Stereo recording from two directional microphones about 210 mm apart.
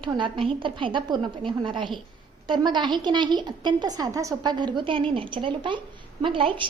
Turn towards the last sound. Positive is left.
turn(degrees=-25)  # may be behind; listen again after turning